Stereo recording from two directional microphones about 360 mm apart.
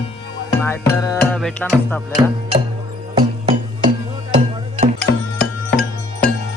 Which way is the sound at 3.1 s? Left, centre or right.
Centre.